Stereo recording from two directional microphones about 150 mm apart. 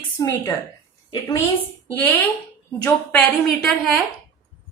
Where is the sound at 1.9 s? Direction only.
10° left (ahead or behind).